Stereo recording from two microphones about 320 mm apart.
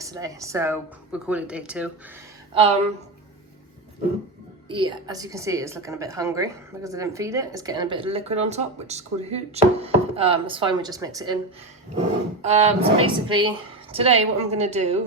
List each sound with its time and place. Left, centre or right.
0.0 s a woman's voice: centre
2.6 s a woman's voice: centre
4.7 s a woman's voice: centre